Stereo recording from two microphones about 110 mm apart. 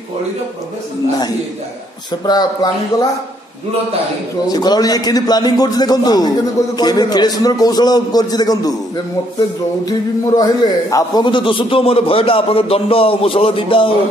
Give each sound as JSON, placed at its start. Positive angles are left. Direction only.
{"t": 2.2, "sound": "a man's voice", "side_deg": 35}
{"t": 4.5, "sound": "a man's voice", "side_deg": 35}
{"t": 11.2, "sound": "speech", "side_deg": 50}